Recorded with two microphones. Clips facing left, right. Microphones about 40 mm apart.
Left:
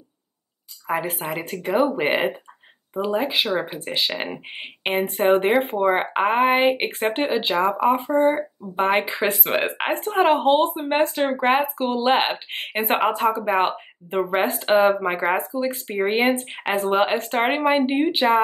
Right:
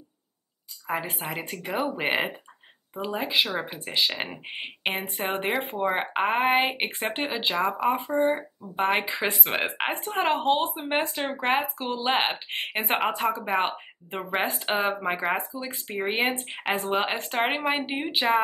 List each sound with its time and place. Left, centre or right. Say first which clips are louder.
0.8 s speech: left 5 dB; centre
16.6 s speech: left 5 dB; centre